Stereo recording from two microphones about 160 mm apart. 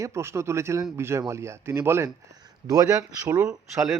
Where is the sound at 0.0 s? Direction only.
15° right (ahead or behind).